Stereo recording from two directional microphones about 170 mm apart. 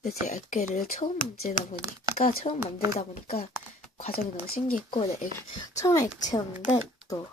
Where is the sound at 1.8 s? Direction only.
20° right (ahead or behind).